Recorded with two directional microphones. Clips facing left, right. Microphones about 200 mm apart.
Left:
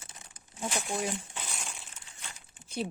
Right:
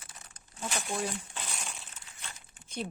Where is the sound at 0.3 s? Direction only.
15° left (ahead or behind).